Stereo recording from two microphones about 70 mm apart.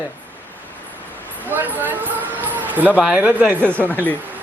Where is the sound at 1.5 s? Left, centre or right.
Right.